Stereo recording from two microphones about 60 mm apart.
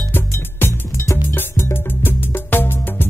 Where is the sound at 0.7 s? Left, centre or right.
Left.